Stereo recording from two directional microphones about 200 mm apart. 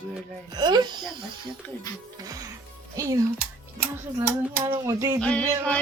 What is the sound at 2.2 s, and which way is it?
Music, 20° right (ahead or behind).